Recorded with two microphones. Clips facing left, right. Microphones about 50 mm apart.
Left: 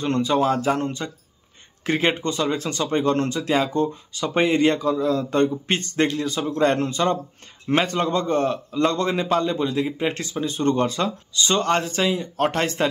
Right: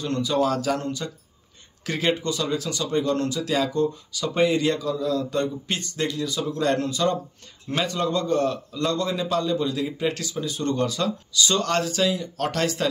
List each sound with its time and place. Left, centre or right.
0.0 s speech: left